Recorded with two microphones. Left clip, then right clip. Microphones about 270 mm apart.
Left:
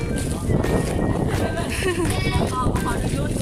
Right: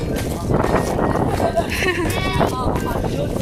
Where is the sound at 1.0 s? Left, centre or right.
Right.